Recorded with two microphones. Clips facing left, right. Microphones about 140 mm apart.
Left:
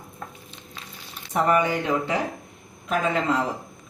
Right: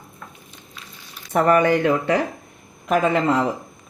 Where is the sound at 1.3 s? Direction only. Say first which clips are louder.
Right 5 dB; 65° right (ahead or behind).